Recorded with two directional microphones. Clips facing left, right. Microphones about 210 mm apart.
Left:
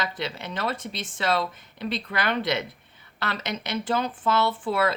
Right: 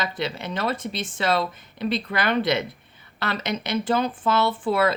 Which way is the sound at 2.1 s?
15° right (ahead or behind).